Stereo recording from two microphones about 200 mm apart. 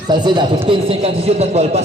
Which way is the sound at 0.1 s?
25° right (ahead or behind).